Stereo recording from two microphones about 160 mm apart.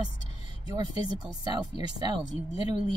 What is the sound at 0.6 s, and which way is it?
Speech, 25° right (ahead or behind).